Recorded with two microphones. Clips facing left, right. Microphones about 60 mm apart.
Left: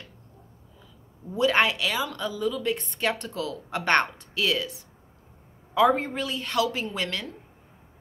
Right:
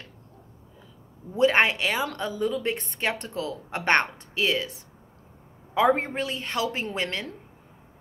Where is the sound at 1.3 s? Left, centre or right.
Right.